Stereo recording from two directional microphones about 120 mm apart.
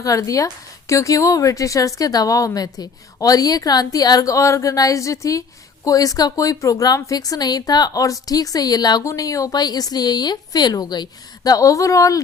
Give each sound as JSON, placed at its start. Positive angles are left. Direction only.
{"t": 0.0, "sound": "a woman's voice", "side_deg": 30}